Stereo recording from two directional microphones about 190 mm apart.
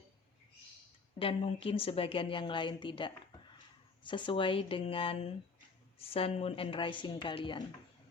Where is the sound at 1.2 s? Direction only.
30° left (ahead or behind).